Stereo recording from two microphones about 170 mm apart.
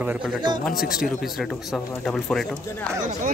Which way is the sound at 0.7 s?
60° left (ahead or behind).